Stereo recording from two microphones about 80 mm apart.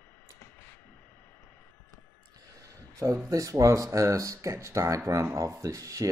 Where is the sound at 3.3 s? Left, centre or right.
Right.